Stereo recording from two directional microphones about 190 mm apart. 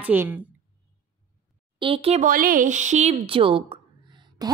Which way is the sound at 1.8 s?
30° right (ahead or behind).